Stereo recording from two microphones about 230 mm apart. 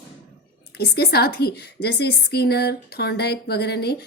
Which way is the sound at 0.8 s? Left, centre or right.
Left.